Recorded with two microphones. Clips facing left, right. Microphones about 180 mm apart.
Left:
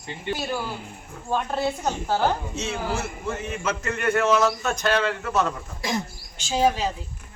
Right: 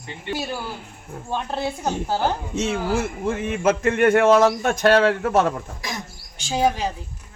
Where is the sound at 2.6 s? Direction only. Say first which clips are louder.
Right 5 dB; 55° right (ahead or behind).